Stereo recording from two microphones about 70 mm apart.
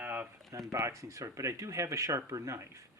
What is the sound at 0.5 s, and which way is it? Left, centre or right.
Speech, right.